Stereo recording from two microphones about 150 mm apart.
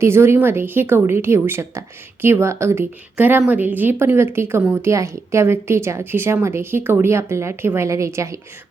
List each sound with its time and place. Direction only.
0.0 s a woman's voice: 15° right (ahead or behind)